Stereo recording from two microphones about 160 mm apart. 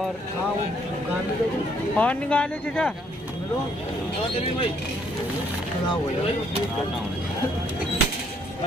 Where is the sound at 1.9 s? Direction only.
10° left (ahead or behind).